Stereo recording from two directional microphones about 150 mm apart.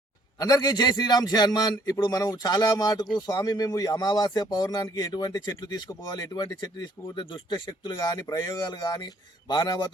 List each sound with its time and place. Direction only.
0.3 s speech: 25° left (ahead or behind)